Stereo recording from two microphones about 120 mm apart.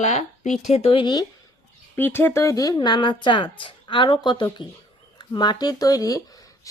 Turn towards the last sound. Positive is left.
turn(degrees=30)  # may be behind; listen again after turning